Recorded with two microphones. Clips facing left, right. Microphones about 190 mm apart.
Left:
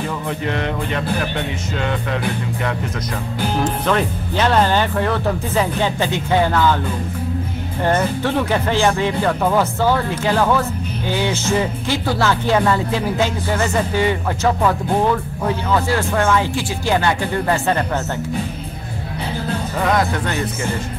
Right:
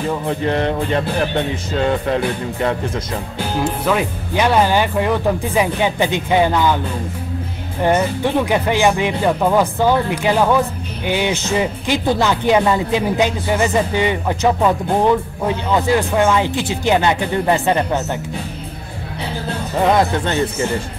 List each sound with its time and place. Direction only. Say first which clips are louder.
0.3 s music: right 5 dB; 35° right (ahead or behind)
3.6 s speech: right 2 dB; 10° right (ahead or behind)
7.8 s speech: right 2 dB; 15° right (ahead or behind)
19.8 s speech: right 4 dB; 25° right (ahead or behind)